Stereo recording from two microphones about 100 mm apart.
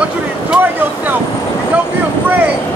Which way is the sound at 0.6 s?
20° right (ahead or behind).